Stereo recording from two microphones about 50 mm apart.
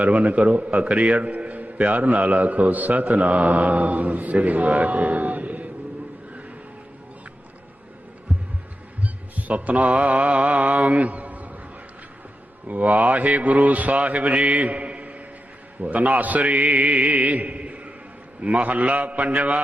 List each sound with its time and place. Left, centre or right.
0.0 s a man's voice: right
8.3 s heart sounds: right
9.3 s mantra: right
12.6 s a man's voice: right